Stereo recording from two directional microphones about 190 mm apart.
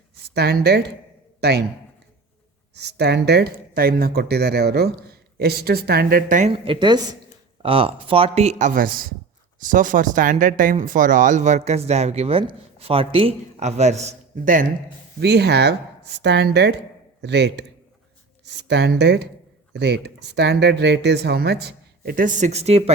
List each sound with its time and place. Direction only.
0.3 s a man's voice: 60° right (ahead or behind)
2.7 s speech: 60° right (ahead or behind); by 6.5 s 45° right (ahead or behind)
6.5 s a woman's voice: 25° right (ahead or behind); by 14.7 s 45° right (ahead or behind)
15.2 s speech: 60° right (ahead or behind); by 22.8 s 35° right (ahead or behind)